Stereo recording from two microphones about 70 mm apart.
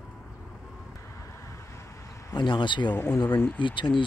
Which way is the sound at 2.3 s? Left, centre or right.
Left.